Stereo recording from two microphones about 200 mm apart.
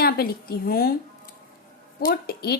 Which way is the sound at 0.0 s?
50° left (ahead or behind).